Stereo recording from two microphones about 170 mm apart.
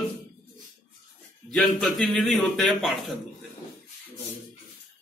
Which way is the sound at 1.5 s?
Centre (ahead or behind).